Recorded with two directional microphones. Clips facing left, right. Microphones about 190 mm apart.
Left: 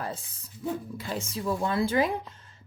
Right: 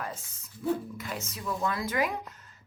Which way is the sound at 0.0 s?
30° left (ahead or behind).